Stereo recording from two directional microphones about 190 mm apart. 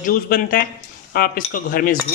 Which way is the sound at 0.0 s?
45° left (ahead or behind).